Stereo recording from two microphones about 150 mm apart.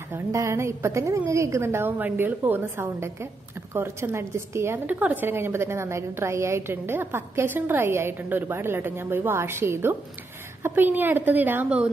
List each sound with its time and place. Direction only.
0.1 s a woman's voice: 20° right (ahead or behind)